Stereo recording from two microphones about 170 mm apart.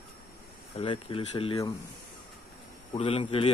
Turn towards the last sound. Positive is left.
turn(degrees=35)  # may be behind; listen again after turning